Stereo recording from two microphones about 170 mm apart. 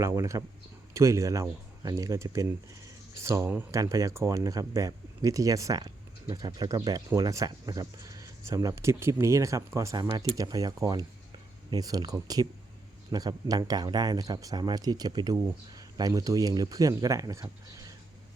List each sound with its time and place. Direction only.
0.0 s speech: 20° right (ahead or behind)